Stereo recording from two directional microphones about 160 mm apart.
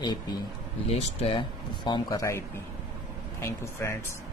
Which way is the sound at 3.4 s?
20° left (ahead or behind).